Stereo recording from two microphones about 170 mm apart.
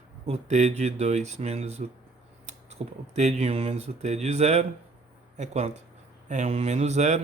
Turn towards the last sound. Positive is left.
turn(degrees=-40)  # may be behind; listen again after turning